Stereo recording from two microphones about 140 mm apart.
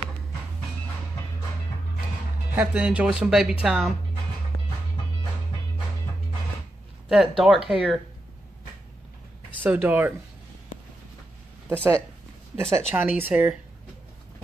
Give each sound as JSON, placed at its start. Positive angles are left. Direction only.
{"t": 2.5, "sound": "speech", "side_deg": -10}
{"t": 7.1, "sound": "speech", "side_deg": -5}
{"t": 9.6, "sound": "speech", "side_deg": -10}
{"t": 11.7, "sound": "speech", "side_deg": -15}